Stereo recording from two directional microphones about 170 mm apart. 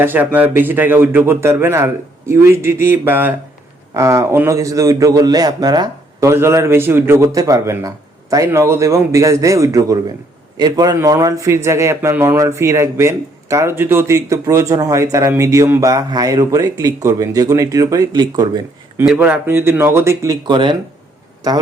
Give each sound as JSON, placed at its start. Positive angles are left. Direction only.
{"t": 0.0, "sound": "a man's voice", "side_deg": -10}
{"t": 19.0, "sound": "a man's voice", "side_deg": -10}